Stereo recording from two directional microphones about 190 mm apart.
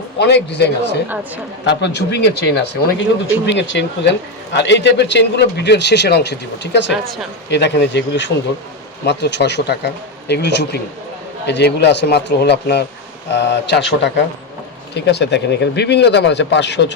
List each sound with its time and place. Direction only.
0.2 s a man's voice: 65° left (ahead or behind)
6.9 s speech: centre (ahead or behind)
7.5 s a man's voice: 65° left (ahead or behind)